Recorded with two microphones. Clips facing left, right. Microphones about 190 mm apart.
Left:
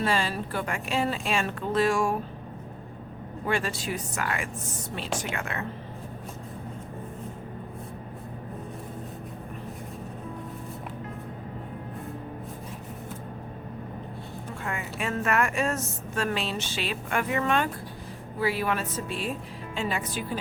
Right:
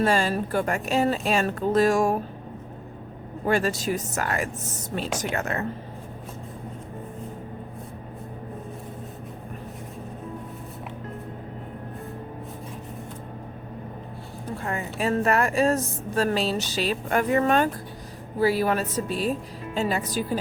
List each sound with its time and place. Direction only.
0.0 s a woman's voice: 45° right (ahead or behind)
3.4 s a woman's voice: 40° right (ahead or behind)
14.6 s a woman's voice: 35° right (ahead or behind)